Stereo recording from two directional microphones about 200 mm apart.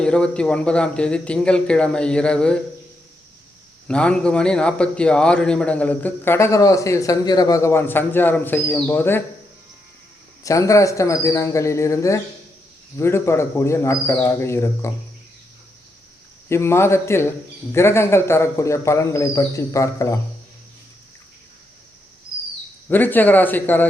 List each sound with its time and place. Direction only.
0.0 s speech: 5° left (ahead or behind)
3.8 s a man's voice: 5° left (ahead or behind)
10.4 s a man's voice: 15° left (ahead or behind)
16.5 s a man's voice: 15° left (ahead or behind)
22.9 s a man's voice: 10° left (ahead or behind)